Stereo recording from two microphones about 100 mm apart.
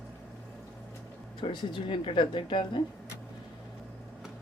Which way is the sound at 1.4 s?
55° left (ahead or behind).